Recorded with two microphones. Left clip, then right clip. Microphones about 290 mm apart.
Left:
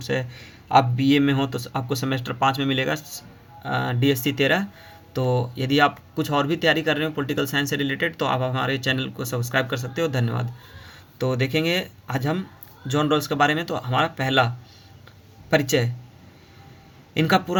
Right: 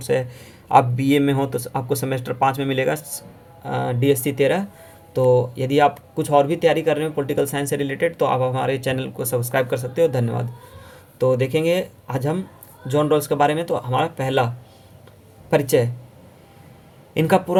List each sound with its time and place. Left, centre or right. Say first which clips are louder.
0.0 s speech: right 5 dB; centre
17.2 s speech: right 3 dB; centre